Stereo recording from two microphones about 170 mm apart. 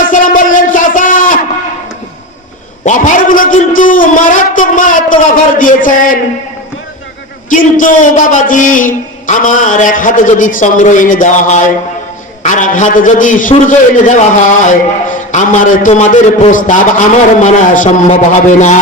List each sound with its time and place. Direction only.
0.1 s a sound: 50° left (ahead or behind)
2.8 s a man's voice: 50° left (ahead or behind)
7.5 s a man's voice: 50° left (ahead or behind)